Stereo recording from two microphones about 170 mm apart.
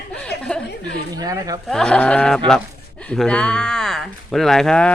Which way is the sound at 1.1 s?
20° right (ahead or behind).